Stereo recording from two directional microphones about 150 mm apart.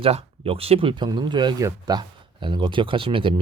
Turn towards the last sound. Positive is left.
turn(degrees=-35)  # may be behind; listen again after turning